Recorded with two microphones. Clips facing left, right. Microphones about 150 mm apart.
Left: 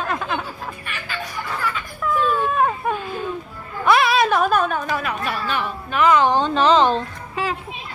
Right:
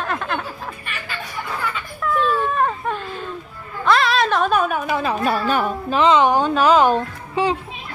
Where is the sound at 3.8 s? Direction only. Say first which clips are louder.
Left 1 dB; 10° left (ahead or behind).